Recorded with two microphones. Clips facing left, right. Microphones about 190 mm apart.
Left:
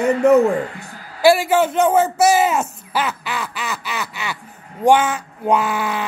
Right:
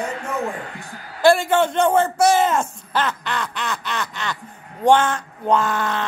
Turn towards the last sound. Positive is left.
turn(degrees=10)  # may be behind; listen again after turning